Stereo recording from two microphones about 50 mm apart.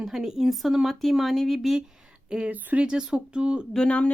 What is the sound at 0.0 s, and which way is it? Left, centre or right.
A woman's voice, centre.